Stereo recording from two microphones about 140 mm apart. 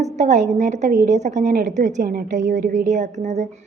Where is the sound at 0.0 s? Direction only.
55° right (ahead or behind).